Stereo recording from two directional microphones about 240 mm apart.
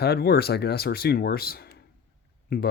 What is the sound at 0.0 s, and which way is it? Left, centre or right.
Speech, left.